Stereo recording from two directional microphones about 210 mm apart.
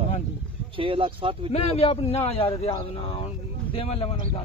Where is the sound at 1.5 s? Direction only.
30° left (ahead or behind).